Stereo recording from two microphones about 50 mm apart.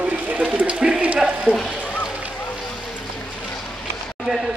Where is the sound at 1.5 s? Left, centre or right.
Right.